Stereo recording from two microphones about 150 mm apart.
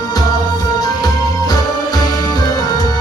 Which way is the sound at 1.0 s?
25° left (ahead or behind).